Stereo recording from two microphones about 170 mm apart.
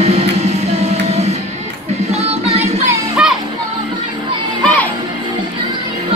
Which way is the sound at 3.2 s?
5° right (ahead or behind).